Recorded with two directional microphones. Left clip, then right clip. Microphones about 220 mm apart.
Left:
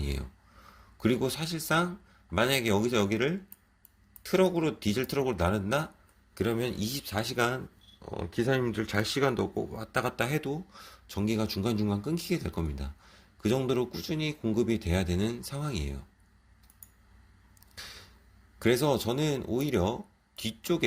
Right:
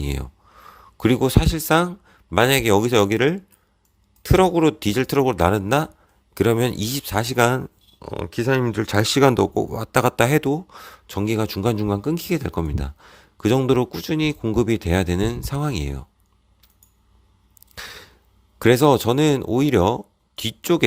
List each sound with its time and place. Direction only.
0.0 s speech: 45° right (ahead or behind)
17.7 s a sound: 45° right (ahead or behind)
18.6 s speech: 45° right (ahead or behind)